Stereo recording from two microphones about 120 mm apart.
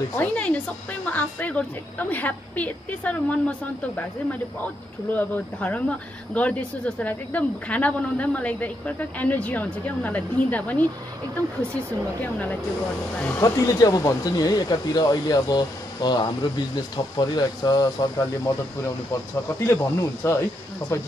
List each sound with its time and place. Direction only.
0.2 s speech: 10° left (ahead or behind)
13.4 s speech: 30° left (ahead or behind)
19.6 s speech: 25° left (ahead or behind)